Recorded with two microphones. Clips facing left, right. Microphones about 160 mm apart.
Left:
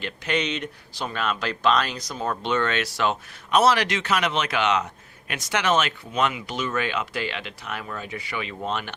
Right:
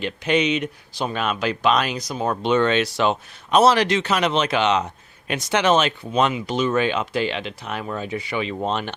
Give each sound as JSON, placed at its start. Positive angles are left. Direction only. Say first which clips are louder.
{"t": 0.0, "sound": "speech", "louder": "right 6 dB", "side_deg": -20}